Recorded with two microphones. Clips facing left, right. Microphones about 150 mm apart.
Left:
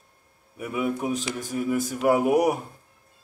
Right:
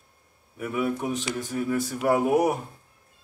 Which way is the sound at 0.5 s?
15° left (ahead or behind).